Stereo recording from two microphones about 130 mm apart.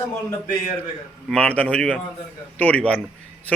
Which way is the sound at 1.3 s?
10° left (ahead or behind).